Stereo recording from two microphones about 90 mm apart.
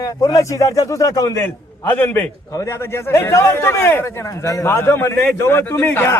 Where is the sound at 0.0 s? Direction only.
40° left (ahead or behind).